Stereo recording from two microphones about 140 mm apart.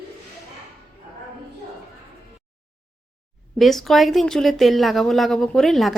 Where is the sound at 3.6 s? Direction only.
Centre (ahead or behind).